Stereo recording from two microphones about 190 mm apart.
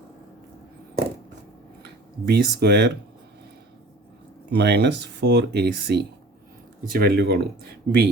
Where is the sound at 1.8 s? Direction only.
60° right (ahead or behind).